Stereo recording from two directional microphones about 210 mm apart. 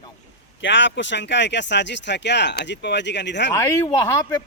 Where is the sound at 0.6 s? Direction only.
60° left (ahead or behind).